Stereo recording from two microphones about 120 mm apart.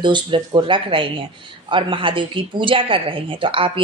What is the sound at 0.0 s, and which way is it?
A woman's voice, 40° right (ahead or behind).